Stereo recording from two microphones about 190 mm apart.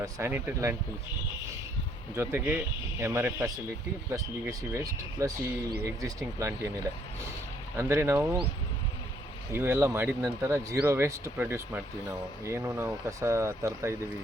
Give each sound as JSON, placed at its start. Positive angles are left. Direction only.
{"t": 0.0, "sound": "speech", "side_deg": -15}
{"t": 2.1, "sound": "speech", "side_deg": -10}
{"t": 7.8, "sound": "speech", "side_deg": -15}
{"t": 9.5, "sound": "speech", "side_deg": -10}